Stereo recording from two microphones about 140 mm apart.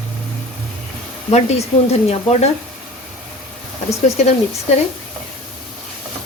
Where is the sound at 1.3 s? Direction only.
50° left (ahead or behind).